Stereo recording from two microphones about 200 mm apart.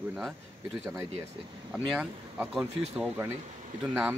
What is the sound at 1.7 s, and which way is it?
Speech, 5° right (ahead or behind).